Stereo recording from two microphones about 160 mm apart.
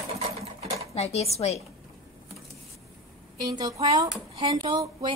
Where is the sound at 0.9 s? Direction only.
40° left (ahead or behind).